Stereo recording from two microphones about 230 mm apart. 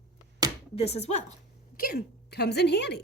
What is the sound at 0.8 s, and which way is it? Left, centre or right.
Speech, left.